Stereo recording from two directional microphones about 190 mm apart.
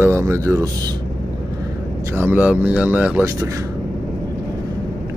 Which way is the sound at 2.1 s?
10° right (ahead or behind).